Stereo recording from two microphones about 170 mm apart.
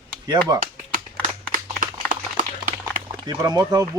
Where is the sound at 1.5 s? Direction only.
55° right (ahead or behind).